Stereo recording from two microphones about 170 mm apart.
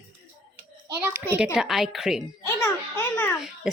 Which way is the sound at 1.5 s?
Centre (ahead or behind).